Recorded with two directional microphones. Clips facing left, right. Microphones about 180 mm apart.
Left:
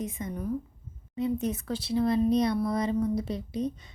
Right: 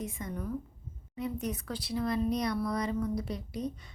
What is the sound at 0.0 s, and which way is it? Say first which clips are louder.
A woman's voice: left 4 dB; 20° left (ahead or behind).